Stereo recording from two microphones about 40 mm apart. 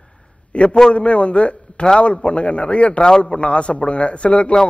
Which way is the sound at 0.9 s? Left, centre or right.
Left.